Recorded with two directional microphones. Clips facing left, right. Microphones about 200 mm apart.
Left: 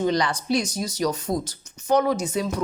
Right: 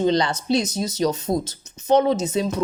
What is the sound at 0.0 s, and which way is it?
Speech, 25° right (ahead or behind).